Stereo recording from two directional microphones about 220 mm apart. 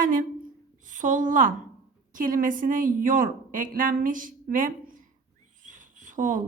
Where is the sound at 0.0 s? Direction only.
40° right (ahead or behind).